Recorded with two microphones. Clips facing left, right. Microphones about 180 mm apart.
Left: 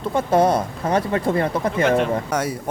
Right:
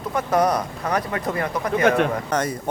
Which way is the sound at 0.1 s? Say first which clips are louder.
Left 3 dB; 25° left (ahead or behind).